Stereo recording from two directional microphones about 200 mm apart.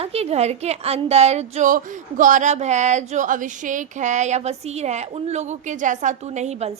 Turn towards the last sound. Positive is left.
turn(degrees=-35)  # may be behind; listen again after turning